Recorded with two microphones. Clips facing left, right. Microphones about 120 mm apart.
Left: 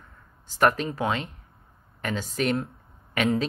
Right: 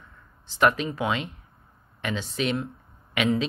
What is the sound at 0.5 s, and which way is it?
Speech, 40° left (ahead or behind).